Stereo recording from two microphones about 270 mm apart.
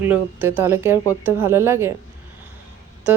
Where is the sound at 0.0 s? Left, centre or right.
Centre.